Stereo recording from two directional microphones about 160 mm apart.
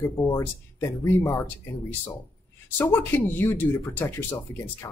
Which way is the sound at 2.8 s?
15° left (ahead or behind).